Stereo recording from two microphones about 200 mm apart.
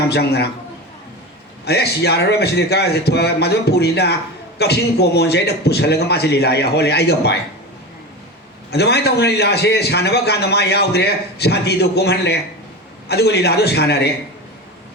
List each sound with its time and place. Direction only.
0.1 s a man's voice: 55° left (ahead or behind)
1.6 s a man's voice: 55° left (ahead or behind)
8.7 s a man's voice: 55° left (ahead or behind)